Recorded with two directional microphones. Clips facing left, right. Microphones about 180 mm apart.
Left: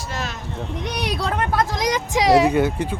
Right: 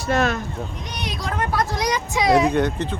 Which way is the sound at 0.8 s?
70° left (ahead or behind).